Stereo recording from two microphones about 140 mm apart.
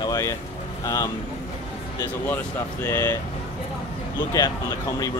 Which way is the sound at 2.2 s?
15° left (ahead or behind).